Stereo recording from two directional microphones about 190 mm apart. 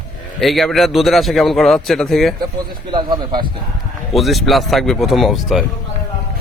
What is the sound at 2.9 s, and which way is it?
Speech, 25° right (ahead or behind).